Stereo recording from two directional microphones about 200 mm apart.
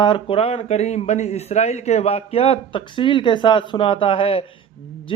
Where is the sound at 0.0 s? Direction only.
25° left (ahead or behind).